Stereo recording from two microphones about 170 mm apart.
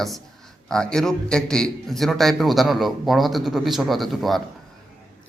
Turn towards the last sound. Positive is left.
turn(degrees=0)  # may be behind; listen again after turning